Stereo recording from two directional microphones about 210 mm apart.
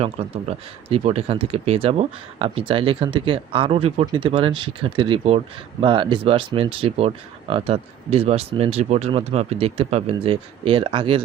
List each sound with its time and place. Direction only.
0.9 s speech: 30° right (ahead or behind)